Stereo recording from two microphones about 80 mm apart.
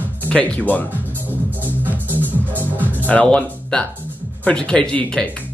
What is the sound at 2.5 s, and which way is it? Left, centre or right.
Music, right.